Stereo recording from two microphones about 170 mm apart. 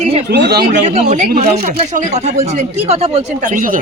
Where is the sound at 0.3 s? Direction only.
75° right (ahead or behind).